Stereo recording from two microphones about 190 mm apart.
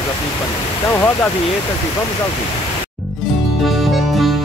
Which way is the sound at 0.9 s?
10° left (ahead or behind).